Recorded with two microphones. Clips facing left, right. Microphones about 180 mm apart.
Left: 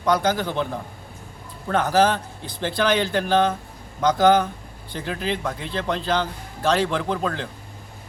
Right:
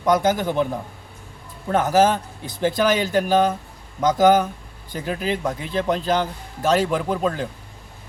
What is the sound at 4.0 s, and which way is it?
Speech, 20° right (ahead or behind).